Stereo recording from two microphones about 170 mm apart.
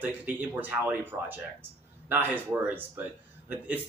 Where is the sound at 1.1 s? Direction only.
20° right (ahead or behind).